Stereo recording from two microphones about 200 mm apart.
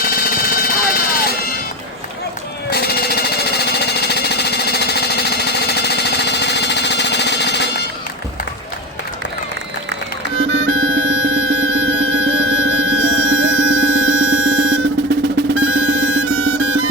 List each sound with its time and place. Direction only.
0.0 s a sound: 50° left (ahead or behind)
2.6 s jackhammer: 50° left (ahead or behind)
10.6 s music: 70° right (ahead or behind)
15.6 s music: 70° right (ahead or behind)